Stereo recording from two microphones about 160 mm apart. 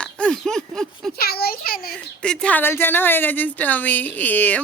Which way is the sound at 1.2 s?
75° left (ahead or behind).